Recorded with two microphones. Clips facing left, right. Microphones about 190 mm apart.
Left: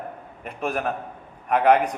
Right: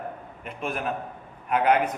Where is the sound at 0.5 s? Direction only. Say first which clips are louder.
Left 4 dB; 55° left (ahead or behind).